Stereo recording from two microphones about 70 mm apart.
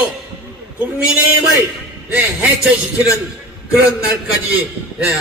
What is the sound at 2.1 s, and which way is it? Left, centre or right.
Speech, right.